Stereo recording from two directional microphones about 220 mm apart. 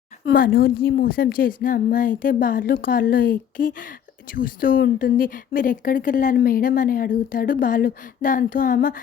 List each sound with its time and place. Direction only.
0.3 s a woman's voice: 40° left (ahead or behind)